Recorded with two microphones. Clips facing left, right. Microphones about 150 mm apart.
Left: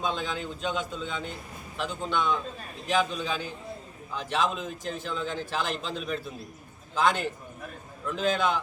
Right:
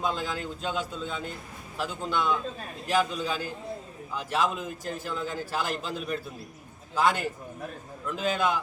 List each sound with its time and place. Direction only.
0.0 s a man's voice: 5° right (ahead or behind)